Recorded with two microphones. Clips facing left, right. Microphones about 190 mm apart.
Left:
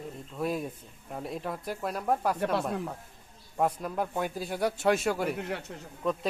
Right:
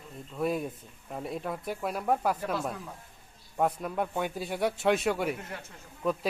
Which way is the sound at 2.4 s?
65° left (ahead or behind).